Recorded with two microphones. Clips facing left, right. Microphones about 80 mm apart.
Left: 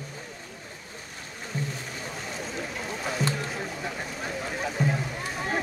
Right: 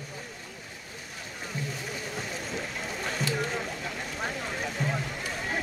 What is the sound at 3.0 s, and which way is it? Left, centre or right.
Rowboat, centre.